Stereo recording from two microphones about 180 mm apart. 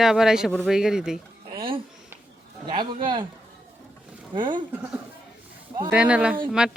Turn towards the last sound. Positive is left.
turn(degrees=-5)  # may be behind; listen again after turning